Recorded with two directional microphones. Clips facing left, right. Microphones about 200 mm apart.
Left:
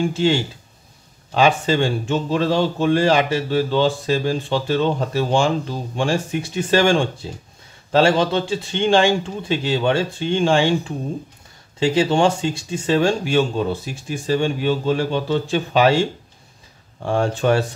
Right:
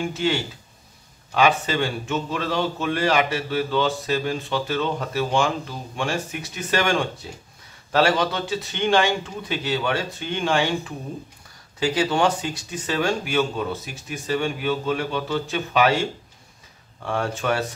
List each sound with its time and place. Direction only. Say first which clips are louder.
0.1 s speech: left 5 dB; 30° left (ahead or behind)